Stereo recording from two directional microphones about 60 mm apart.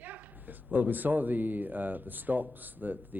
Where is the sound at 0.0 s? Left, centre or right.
Right.